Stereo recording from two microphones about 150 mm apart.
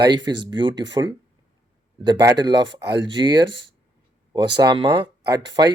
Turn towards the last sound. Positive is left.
turn(degrees=-30)  # may be behind; listen again after turning